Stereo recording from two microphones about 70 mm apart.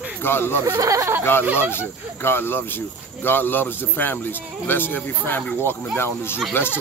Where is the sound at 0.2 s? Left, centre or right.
Left.